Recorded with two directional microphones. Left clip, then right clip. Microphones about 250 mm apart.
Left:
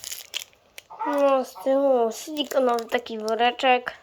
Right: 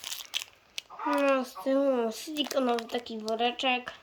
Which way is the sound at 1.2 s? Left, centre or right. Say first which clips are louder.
Left 8 dB; centre.